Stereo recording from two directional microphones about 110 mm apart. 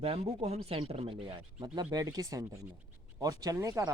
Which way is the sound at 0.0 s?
70° right (ahead or behind).